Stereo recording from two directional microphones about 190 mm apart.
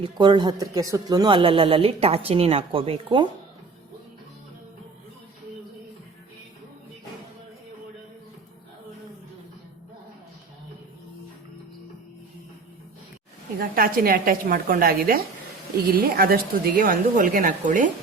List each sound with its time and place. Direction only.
0.0 s speech: 25° right (ahead or behind)
13.6 s a woman's voice: 50° right (ahead or behind)